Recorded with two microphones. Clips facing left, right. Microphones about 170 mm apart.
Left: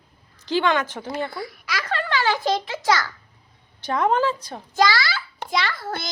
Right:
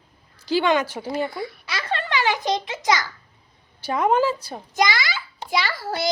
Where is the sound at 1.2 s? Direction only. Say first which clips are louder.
Right 2 dB; 20° right (ahead or behind).